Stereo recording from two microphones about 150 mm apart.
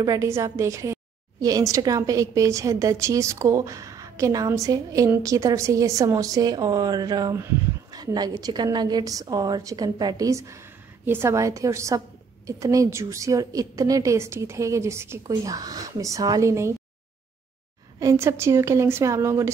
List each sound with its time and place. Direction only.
0.0 s a woman's voice: 20° right (ahead or behind)
17.9 s a woman's voice: 20° right (ahead or behind)